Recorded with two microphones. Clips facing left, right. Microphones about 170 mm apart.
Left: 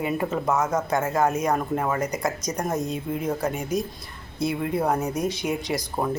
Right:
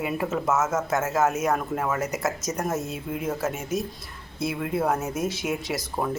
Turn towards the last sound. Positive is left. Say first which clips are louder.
# left 2 dB
turn(degrees=0)  # may be behind; listen again after turning